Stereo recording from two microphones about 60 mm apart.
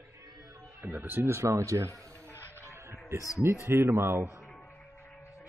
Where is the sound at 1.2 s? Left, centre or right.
Right.